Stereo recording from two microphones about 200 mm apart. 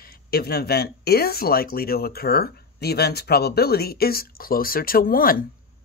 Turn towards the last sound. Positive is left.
turn(degrees=45)  # may be behind; listen again after turning